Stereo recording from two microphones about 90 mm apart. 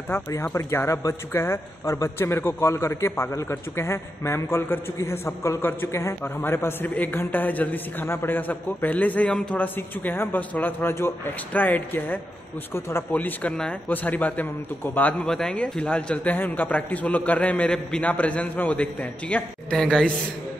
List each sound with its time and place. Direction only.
0.4 s a man's voice: 30° left (ahead or behind)
13.1 s a man's voice: 15° left (ahead or behind)
15.2 s a man's voice: 10° left (ahead or behind)